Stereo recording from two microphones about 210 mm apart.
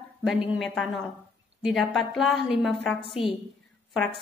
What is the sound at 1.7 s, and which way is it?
A woman's voice, centre (ahead or behind).